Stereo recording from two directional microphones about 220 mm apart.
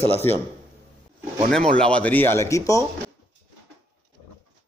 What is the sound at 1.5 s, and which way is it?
A man's voice, 5° left (ahead or behind).